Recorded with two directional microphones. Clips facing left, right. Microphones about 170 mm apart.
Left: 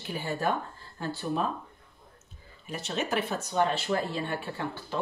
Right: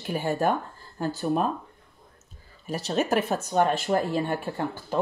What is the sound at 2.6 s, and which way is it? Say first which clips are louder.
Speech: right 6 dB; 40° right (ahead or behind).